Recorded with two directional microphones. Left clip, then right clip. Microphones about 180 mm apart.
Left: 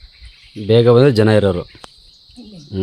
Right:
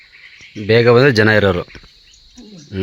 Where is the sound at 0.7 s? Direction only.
15° left (ahead or behind).